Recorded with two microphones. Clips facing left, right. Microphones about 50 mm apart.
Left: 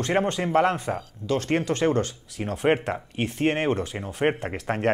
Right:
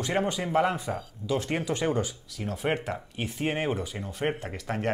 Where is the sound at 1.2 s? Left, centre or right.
Centre.